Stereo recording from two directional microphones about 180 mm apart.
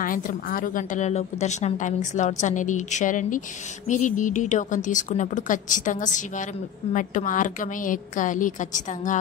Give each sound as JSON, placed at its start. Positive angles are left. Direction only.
{"t": 0.0, "sound": "a woman's voice", "side_deg": 50}